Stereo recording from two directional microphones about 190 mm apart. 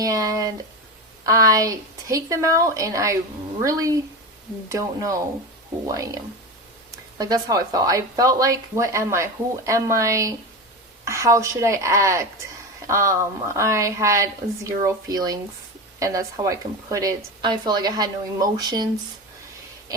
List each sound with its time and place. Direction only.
0.0 s speech: 20° right (ahead or behind)
7.2 s speech: 20° right (ahead or behind)